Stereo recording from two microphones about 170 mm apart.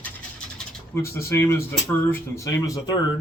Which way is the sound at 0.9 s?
15° left (ahead or behind).